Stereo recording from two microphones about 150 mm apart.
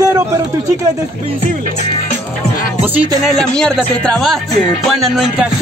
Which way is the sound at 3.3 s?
5° left (ahead or behind).